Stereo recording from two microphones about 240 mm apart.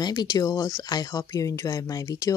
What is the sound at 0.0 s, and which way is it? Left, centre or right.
Speech, centre.